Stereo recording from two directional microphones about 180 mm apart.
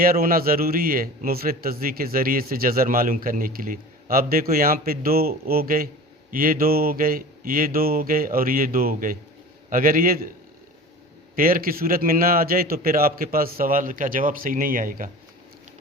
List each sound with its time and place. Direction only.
0.0 s a man's voice: 55° right (ahead or behind)
11.3 s a man's voice: 50° right (ahead or behind)